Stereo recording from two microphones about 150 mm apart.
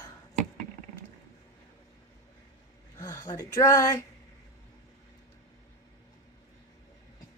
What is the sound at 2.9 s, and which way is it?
Speech, 20° left (ahead or behind).